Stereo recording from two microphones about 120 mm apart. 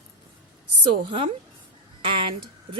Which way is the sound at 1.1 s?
45° right (ahead or behind).